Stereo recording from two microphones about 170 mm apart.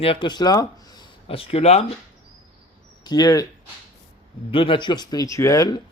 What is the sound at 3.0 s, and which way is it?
Speech, 20° left (ahead or behind).